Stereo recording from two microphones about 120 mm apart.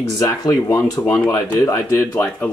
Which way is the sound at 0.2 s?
30° left (ahead or behind).